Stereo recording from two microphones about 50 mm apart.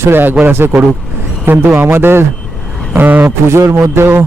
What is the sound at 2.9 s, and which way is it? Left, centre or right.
Speech, right.